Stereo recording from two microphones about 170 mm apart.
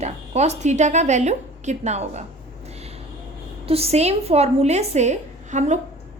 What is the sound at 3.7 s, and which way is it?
A woman's voice, 35° right (ahead or behind).